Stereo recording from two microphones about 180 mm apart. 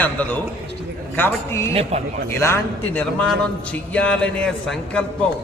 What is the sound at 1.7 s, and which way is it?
Speech, 35° right (ahead or behind).